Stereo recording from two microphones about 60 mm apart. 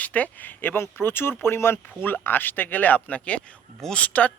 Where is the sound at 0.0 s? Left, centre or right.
Left.